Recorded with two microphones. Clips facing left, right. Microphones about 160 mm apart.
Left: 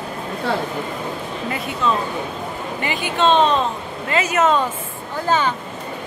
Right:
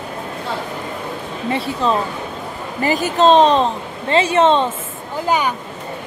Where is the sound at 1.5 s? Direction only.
30° right (ahead or behind).